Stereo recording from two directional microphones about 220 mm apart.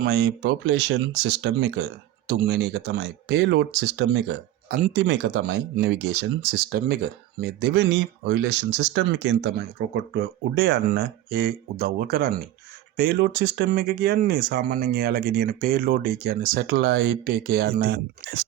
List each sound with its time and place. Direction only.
0.0 s speech: 50° right (ahead or behind)